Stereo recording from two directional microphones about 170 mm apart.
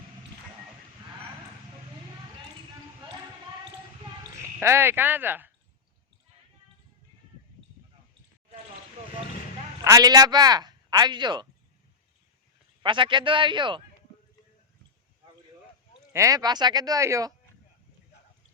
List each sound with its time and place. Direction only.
4.6 s speech: 15° right (ahead or behind)
9.8 s speech: 20° right (ahead or behind)
12.8 s speech: 30° right (ahead or behind)
16.1 s speech: 20° right (ahead or behind)